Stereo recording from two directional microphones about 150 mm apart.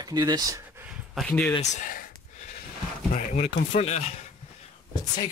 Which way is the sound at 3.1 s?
55° left (ahead or behind).